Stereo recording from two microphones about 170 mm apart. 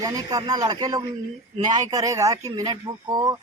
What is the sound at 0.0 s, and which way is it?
A man's voice, 20° right (ahead or behind).